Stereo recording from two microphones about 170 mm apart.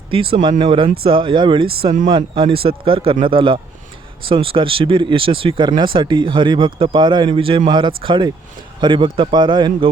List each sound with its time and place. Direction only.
0.1 s a man's voice: 35° right (ahead or behind)